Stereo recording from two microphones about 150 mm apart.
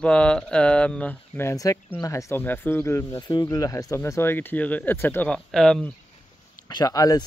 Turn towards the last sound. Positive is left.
turn(degrees=25)  # may be behind; listen again after turning